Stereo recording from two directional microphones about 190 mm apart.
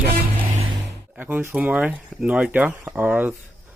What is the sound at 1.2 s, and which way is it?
Speech, 10° right (ahead or behind).